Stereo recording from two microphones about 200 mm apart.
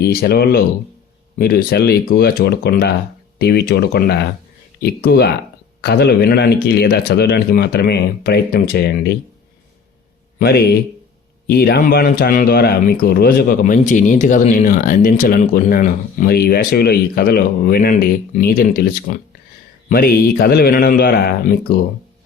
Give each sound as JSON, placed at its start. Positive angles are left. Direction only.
{"t": 0.0, "sound": "speech", "side_deg": 50}
{"t": 10.3, "sound": "a man's voice", "side_deg": 50}